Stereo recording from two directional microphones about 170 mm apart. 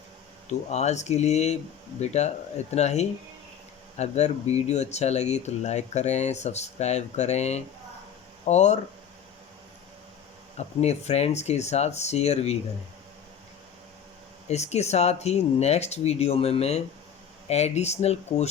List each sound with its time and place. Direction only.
0.7 s speech: 40° left (ahead or behind)
10.8 s speech: 40° left (ahead or behind)
14.4 s speech: 40° left (ahead or behind)